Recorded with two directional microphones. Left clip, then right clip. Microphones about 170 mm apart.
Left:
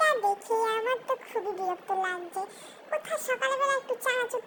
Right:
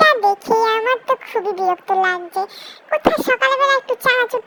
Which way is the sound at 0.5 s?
35° right (ahead or behind).